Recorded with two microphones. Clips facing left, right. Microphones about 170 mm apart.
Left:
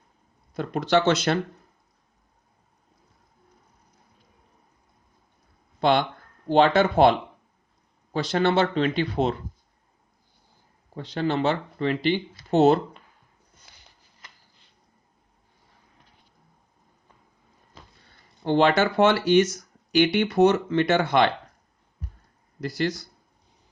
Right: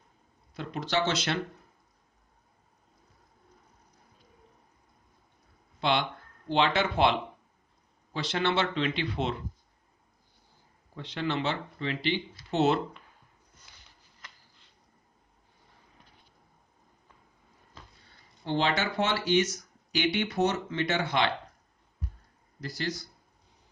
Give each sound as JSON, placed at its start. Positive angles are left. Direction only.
{"t": 0.5, "sound": "speech", "side_deg": 50}
{"t": 5.8, "sound": "speech", "side_deg": 45}
{"t": 10.9, "sound": "speech", "side_deg": 40}
{"t": 18.4, "sound": "speech", "side_deg": 55}